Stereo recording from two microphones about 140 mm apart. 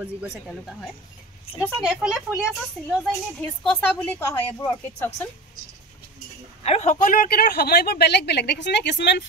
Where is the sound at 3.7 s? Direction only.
10° left (ahead or behind).